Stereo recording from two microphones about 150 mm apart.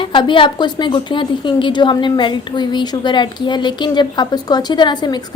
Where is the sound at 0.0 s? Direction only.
35° left (ahead or behind).